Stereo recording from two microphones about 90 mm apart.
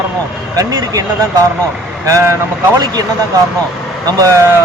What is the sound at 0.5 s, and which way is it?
Speech, 40° right (ahead or behind).